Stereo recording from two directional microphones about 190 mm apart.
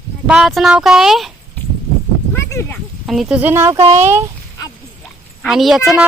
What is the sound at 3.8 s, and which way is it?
Speech, 35° right (ahead or behind).